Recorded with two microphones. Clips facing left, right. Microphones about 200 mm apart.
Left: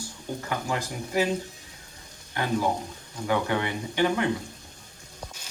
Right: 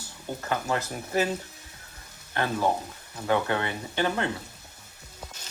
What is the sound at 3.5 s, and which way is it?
Speech, 15° left (ahead or behind).